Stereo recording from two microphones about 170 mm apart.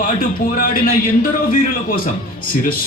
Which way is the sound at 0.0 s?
55° left (ahead or behind).